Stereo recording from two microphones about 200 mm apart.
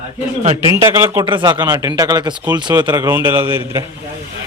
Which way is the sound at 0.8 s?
15° right (ahead or behind).